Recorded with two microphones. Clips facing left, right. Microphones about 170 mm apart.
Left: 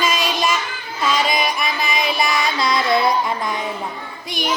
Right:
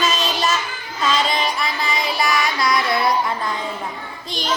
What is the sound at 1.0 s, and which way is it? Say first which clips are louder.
Music: left 1 dB; 10° left (ahead or behind).